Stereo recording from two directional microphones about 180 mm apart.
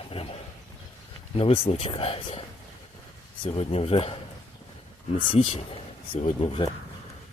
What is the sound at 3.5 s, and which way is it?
Speech, 35° left (ahead or behind).